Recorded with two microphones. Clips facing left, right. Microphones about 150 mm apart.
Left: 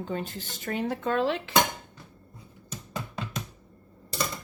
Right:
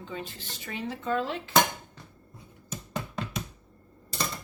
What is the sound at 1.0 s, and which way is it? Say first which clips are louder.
Dishes: left 2 dB; 80° left.